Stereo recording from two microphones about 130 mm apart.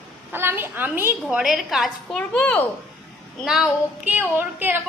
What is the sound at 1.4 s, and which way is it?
A woman's voice, 5° right (ahead or behind).